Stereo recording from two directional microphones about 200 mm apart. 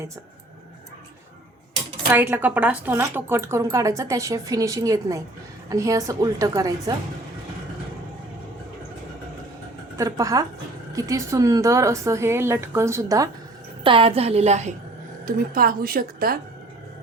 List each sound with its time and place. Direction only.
2.0 s a woman's voice: 10° right (ahead or behind)
10.0 s a woman's voice: 15° right (ahead or behind)
13.8 s a woman's voice: 25° right (ahead or behind)
15.5 s a woman's voice: 45° right (ahead or behind)